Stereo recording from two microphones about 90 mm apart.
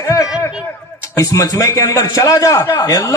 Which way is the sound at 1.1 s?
40° left (ahead or behind).